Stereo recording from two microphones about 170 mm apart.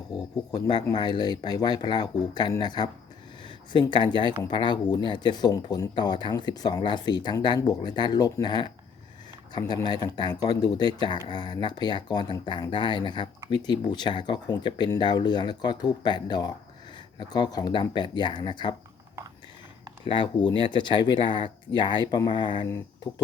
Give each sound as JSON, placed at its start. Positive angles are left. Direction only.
{"t": 0.5, "sound": "speech", "side_deg": 25}
{"t": 20.1, "sound": "speech", "side_deg": 30}